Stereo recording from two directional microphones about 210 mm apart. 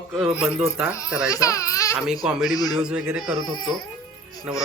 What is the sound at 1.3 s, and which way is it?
Speech, 15° left (ahead or behind).